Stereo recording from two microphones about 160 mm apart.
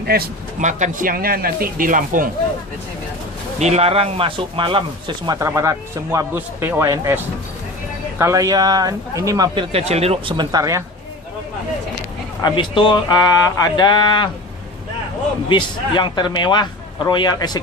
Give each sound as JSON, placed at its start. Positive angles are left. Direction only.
{"t": 0.6, "sound": "a man's voice", "side_deg": -50}
{"t": 3.6, "sound": "speech", "side_deg": -45}
{"t": 8.2, "sound": "speech", "side_deg": -20}
{"t": 9.6, "sound": "speech", "side_deg": -40}
{"t": 12.4, "sound": "a man's voice", "side_deg": 30}
{"t": 15.4, "sound": "a man's voice", "side_deg": 30}